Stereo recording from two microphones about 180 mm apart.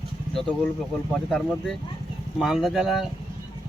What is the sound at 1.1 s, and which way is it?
Speech, 5° left (ahead or behind).